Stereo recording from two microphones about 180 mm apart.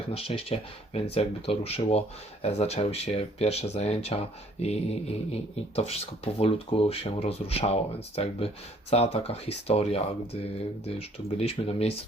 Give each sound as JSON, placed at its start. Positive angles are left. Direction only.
{"t": 0.1, "sound": "speech", "side_deg": 30}